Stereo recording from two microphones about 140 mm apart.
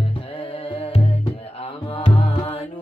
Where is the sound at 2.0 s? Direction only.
40° left (ahead or behind).